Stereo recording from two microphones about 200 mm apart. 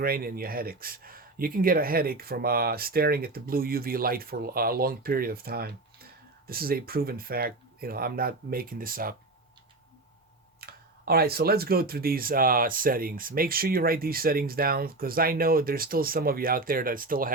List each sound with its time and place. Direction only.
0.0 s speech: 50° right (ahead or behind)
10.6 s speech: 50° right (ahead or behind)